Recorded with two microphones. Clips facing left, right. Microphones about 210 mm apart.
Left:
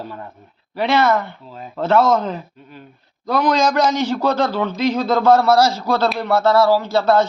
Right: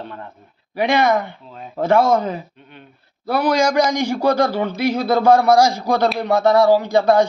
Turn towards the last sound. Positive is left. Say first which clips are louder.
# right 1 dB
turn(degrees=-15)  # may be behind; listen again after turning